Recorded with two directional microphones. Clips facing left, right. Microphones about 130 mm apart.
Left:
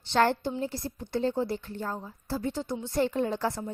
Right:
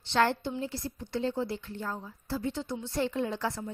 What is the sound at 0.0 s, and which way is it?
A woman's voice, 45° left (ahead or behind).